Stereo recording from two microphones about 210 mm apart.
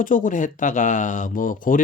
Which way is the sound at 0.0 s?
40° left (ahead or behind).